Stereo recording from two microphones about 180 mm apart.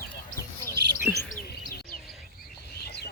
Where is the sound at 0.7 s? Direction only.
70° right (ahead or behind).